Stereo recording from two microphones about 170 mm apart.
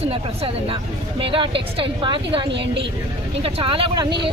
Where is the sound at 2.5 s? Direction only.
90° right.